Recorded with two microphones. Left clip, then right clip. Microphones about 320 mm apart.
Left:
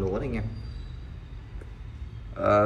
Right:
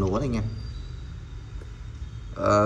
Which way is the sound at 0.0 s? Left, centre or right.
Centre.